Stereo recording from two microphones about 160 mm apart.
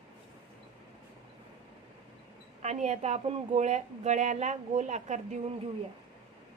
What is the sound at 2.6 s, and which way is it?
A woman's voice, 45° right (ahead or behind).